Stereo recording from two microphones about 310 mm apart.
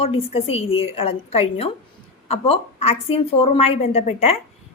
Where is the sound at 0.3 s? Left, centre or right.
Centre.